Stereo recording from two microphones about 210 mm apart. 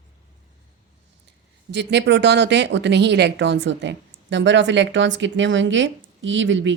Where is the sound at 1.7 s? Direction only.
55° right (ahead or behind).